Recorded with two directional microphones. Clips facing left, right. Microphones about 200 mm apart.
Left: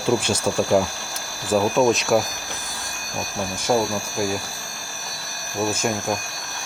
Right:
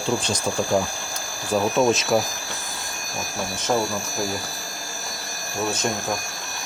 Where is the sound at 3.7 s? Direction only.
10° left (ahead or behind).